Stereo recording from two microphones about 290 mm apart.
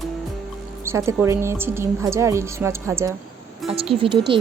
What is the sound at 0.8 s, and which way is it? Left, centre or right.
A woman's voice, centre.